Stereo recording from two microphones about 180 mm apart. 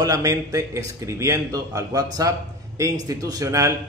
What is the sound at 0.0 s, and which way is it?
A man's voice, 20° right (ahead or behind).